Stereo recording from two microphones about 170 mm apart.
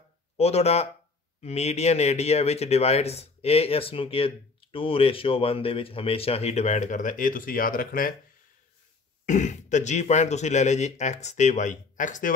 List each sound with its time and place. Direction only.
0.4 s speech: 35° left (ahead or behind); by 8.2 s 55° left (ahead or behind)
9.2 s speech: 45° left (ahead or behind)